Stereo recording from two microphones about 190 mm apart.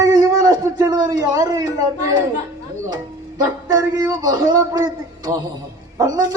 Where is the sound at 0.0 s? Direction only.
20° right (ahead or behind).